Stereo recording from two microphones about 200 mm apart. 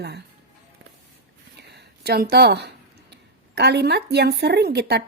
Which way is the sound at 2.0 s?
50° right (ahead or behind).